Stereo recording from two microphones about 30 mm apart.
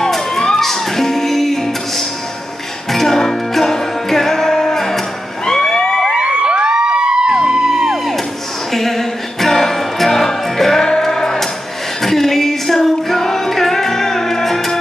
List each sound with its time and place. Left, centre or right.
0.0 s music: centre
5.6 s a sound: centre
6.0 s music: right
7.7 s music: centre
8.7 s music: centre